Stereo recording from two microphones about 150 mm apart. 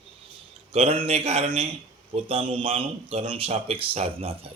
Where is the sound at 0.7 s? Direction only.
40° right (ahead or behind).